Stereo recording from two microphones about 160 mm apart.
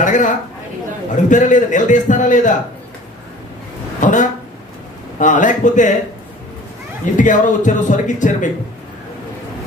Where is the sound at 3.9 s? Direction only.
55° left (ahead or behind).